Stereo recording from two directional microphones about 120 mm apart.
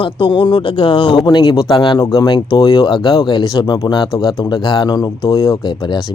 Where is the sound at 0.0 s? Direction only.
40° left (ahead or behind).